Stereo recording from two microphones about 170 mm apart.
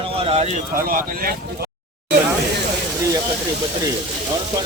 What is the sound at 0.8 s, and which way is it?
Speech, 60° right (ahead or behind).